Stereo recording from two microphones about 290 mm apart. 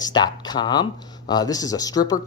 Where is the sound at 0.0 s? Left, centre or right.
Centre.